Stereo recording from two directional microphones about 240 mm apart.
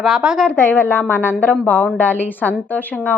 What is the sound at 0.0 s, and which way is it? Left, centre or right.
A woman's voice, centre.